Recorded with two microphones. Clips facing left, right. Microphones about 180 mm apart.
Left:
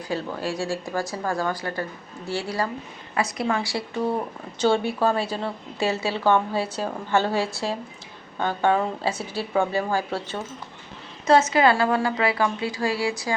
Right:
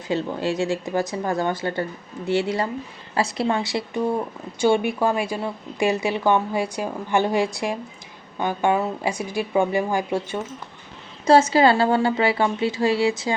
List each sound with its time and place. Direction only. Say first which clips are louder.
0.1 s a woman's voice: right 5 dB; 25° right (ahead or behind)
11.3 s speech: right 3 dB; 30° right (ahead or behind)